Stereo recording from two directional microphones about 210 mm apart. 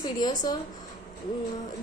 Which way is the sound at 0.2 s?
20° left (ahead or behind).